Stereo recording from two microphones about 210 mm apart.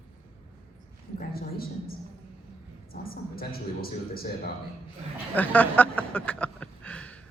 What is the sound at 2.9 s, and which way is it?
A woman's voice, 45° left (ahead or behind).